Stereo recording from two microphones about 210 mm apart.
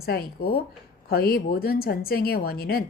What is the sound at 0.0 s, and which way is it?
A woman's voice, 45° left (ahead or behind).